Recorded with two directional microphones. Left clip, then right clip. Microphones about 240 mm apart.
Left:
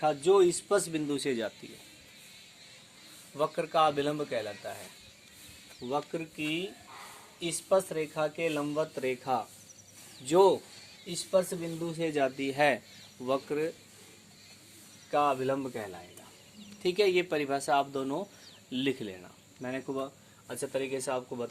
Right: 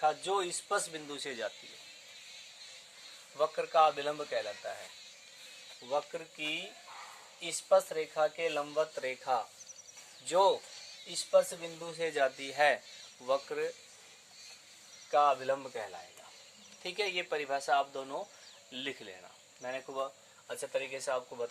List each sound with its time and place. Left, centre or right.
0.0 s speech: centre
3.3 s speech: centre
5.8 s speech: centre
15.1 s speech: centre
16.8 s speech: left